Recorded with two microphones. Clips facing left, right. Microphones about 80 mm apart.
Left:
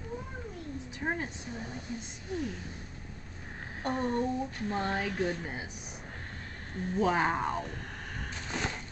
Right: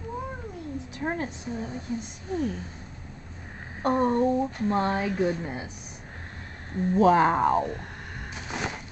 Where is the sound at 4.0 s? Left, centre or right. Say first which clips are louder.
Right 7 dB; right.